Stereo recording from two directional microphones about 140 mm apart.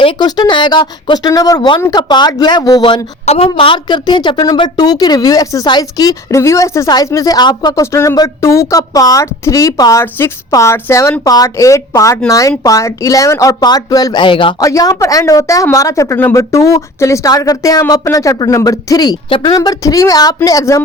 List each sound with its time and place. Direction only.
0.0 s a woman's voice: 30° left (ahead or behind)
3.2 s a woman's voice: 45° left (ahead or behind)
14.6 s a woman's voice: 25° left (ahead or behind)